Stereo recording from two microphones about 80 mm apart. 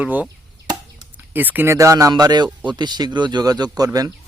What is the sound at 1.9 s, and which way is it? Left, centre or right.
A man's voice, right.